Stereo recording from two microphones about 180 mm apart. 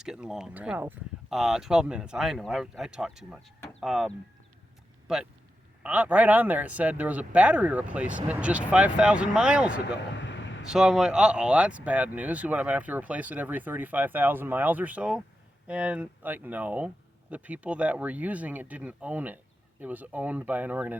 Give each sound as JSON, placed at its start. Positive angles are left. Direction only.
{"t": 0.0, "sound": "speech", "side_deg": -5}
{"t": 10.2, "sound": "a sound", "side_deg": 90}
{"t": 10.7, "sound": "speech", "side_deg": -5}